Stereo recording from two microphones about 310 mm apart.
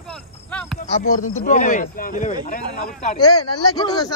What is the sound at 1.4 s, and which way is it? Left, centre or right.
Speech, left.